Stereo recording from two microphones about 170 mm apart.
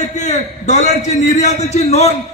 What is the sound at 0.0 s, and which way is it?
A man's voice, 45° left (ahead or behind).